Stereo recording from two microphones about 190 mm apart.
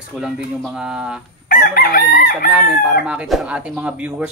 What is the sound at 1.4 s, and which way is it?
Chicken, 50° left (ahead or behind).